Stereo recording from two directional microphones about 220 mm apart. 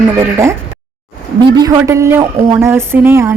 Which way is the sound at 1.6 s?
15° right (ahead or behind).